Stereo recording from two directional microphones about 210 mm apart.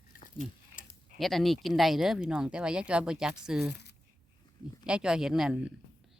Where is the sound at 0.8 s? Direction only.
40° left (ahead or behind).